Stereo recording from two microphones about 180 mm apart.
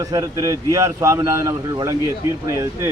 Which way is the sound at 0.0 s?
20° right (ahead or behind).